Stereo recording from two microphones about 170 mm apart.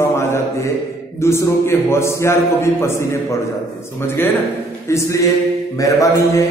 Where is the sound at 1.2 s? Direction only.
15° left (ahead or behind).